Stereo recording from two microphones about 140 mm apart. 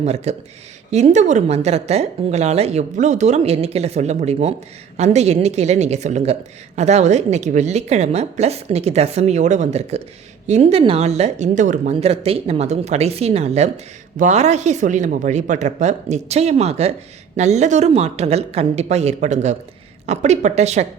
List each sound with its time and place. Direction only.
0.0 s a woman's voice: 50° right (ahead or behind)